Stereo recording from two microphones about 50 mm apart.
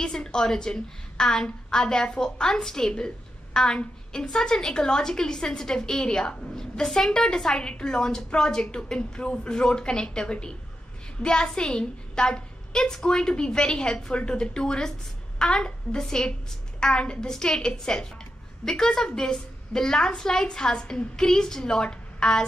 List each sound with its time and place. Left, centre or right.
0.0 s a woman's voice: centre